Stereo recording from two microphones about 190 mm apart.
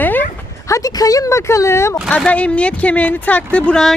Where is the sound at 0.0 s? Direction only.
10° left (ahead or behind).